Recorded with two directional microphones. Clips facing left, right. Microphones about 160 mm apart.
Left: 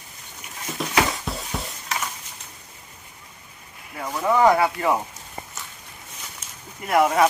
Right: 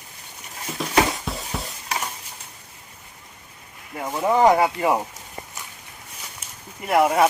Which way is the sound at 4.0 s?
25° right (ahead or behind).